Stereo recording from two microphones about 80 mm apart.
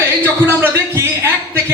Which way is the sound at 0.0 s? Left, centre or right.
Right.